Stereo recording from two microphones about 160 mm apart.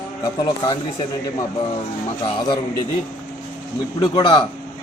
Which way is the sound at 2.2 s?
30° left (ahead or behind).